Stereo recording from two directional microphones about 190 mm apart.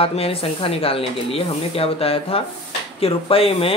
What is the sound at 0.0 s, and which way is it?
Speech, 30° left (ahead or behind).